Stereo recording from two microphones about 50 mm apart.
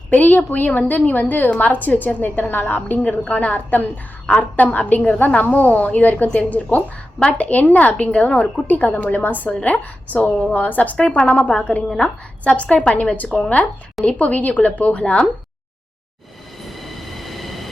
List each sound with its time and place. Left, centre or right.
0.1 s a woman's voice: left
8.6 s a woman's voice: left
16.6 s train: centre